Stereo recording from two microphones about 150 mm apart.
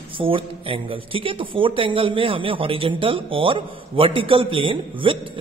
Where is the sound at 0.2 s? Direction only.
35° right (ahead or behind).